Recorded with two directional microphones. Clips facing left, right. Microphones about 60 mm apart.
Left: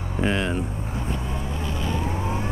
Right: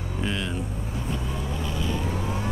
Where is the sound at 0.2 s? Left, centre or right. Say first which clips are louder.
Left 6 dB; left.